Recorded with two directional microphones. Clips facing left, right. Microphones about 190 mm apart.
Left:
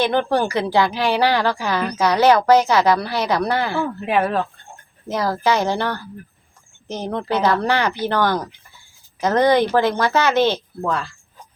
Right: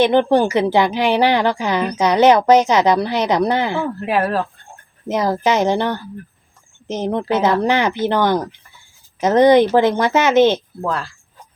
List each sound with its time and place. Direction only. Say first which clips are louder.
0.0 s a woman's voice: right 5 dB; 20° right (ahead or behind)
3.8 s speech: right 1 dB; centre (ahead or behind)
5.0 s a woman's voice: right 2 dB; 20° right (ahead or behind)
10.8 s speech: even; centre (ahead or behind)